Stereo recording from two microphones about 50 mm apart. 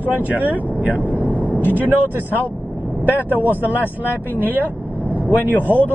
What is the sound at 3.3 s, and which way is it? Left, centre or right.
Speech, right.